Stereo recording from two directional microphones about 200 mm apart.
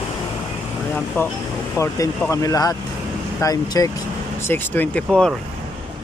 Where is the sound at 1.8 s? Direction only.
15° left (ahead or behind).